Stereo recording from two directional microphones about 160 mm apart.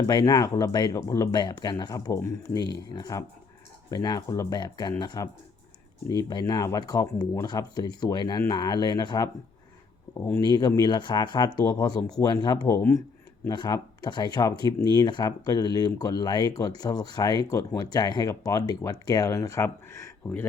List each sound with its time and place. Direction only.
0.1 s speech: 25° left (ahead or behind)
10.2 s speech: 15° left (ahead or behind)
10.4 s speech: 25° left (ahead or behind)